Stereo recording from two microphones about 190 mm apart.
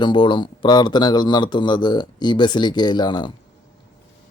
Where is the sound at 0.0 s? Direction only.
25° left (ahead or behind).